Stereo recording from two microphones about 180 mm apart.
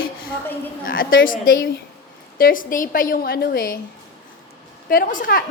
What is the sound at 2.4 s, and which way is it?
A woman's voice, 50° left (ahead or behind).